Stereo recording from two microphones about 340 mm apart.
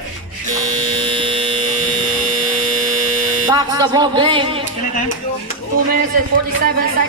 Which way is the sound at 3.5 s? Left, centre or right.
Centre.